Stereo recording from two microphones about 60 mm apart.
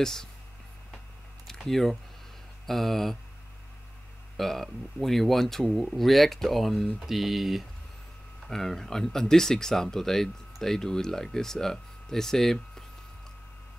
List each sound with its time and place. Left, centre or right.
0.0 s speech: centre
1.5 s a sound: centre
2.6 s speech: centre
4.4 s speech: centre
8.5 s speech: centre